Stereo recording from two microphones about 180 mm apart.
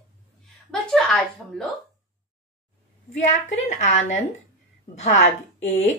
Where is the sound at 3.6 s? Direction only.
40° left (ahead or behind).